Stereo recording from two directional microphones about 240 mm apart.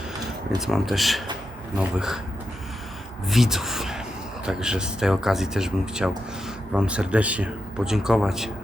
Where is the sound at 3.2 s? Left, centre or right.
Centre.